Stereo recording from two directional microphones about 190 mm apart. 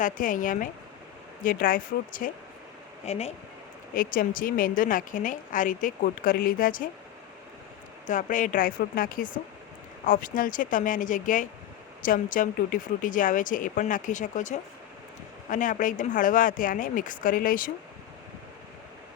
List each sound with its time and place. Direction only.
0.0 s a woman's voice: 45° left (ahead or behind)
3.1 s speech: 35° left (ahead or behind)
3.9 s a woman's voice: 50° left (ahead or behind)
8.0 s a woman's voice: 40° left (ahead or behind)